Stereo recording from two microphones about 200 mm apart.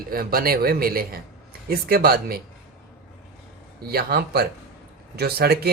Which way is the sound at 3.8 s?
50° right (ahead or behind).